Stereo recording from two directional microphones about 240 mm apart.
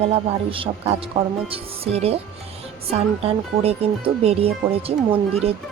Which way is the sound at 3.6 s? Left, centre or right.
Right.